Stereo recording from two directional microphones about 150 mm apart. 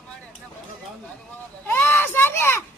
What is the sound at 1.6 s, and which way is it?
A child's voice, 15° left (ahead or behind).